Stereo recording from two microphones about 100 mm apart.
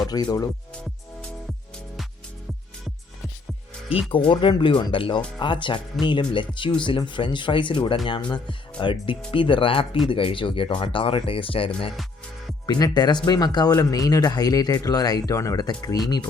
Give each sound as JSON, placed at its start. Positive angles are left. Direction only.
{"t": 0.1, "sound": "speech", "side_deg": 40}
{"t": 4.3, "sound": "speech", "side_deg": 55}
{"t": 12.6, "sound": "speech", "side_deg": 45}